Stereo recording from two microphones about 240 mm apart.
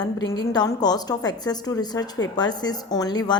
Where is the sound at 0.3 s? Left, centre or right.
Centre.